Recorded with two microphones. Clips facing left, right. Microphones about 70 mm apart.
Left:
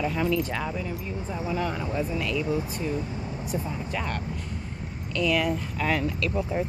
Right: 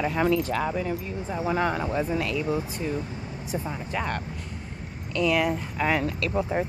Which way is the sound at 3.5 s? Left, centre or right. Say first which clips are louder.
Right 1 dB; right.